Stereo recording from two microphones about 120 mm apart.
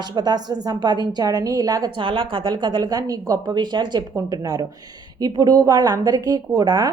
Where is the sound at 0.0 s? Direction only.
35° right (ahead or behind).